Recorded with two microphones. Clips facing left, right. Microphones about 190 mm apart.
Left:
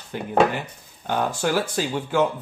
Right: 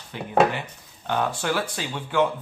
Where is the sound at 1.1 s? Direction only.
45° left (ahead or behind).